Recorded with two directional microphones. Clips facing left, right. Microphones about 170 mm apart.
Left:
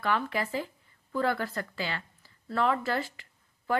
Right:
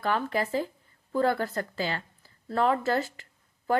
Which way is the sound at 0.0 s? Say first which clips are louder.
Right 2 dB; 40° right (ahead or behind).